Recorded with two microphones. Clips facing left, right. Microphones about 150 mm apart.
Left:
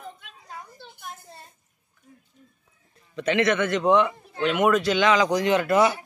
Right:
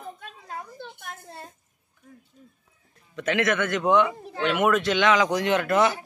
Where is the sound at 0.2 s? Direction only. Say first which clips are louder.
Right 4 dB; 55° right (ahead or behind).